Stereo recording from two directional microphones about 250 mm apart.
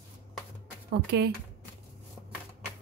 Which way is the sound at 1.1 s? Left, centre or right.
Right.